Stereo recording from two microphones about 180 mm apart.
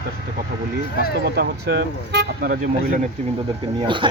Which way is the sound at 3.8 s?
25° right (ahead or behind).